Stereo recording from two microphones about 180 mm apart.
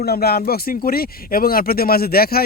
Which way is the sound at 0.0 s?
60° left (ahead or behind).